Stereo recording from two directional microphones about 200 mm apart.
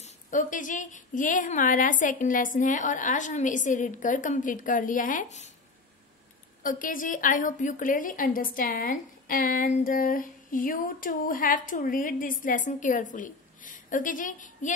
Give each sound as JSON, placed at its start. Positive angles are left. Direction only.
{"t": 0.0, "sound": "speech", "side_deg": 40}
{"t": 6.6, "sound": "a woman's voice", "side_deg": 40}